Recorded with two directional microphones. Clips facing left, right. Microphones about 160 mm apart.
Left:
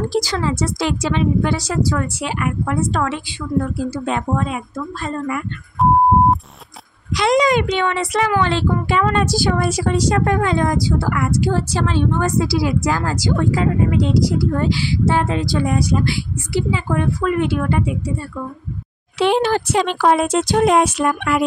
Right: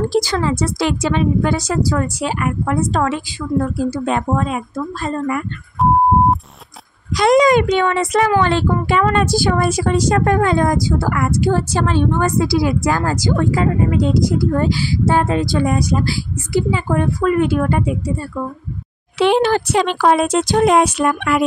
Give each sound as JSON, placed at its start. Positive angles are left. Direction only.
{"t": 0.1, "sound": "speech", "side_deg": -55}
{"t": 7.2, "sound": "speech", "side_deg": -50}
{"t": 19.1, "sound": "speech", "side_deg": -65}
{"t": 20.7, "sound": "speech", "side_deg": -80}